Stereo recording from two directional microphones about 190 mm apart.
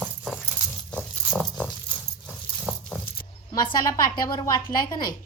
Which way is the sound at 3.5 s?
25° left (ahead or behind).